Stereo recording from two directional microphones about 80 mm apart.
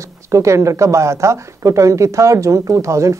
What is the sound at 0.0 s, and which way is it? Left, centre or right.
Speech, right.